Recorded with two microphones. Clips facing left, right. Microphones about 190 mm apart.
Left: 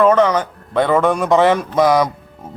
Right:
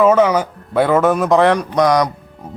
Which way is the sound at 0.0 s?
5° right (ahead or behind).